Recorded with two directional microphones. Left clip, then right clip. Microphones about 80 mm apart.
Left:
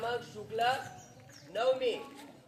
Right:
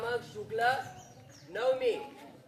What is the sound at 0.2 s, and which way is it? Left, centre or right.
A man's voice, right.